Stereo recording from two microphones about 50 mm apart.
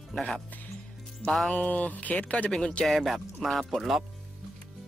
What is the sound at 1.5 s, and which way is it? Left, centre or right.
Speech, left.